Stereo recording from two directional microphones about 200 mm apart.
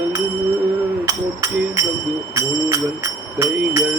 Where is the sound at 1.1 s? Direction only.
15° right (ahead or behind).